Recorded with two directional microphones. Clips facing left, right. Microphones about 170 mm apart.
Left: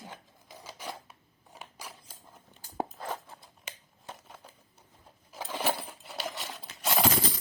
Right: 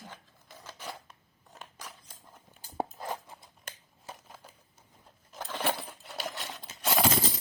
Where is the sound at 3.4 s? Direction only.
Centre (ahead or behind).